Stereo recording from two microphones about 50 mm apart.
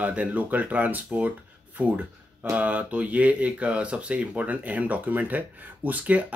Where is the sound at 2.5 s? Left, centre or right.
Right.